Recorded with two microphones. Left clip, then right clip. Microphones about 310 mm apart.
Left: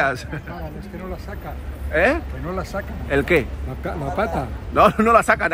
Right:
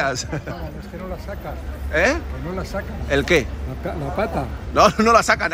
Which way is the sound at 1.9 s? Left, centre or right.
Centre.